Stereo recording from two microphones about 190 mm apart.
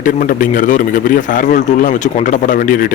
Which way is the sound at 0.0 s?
45° left (ahead or behind).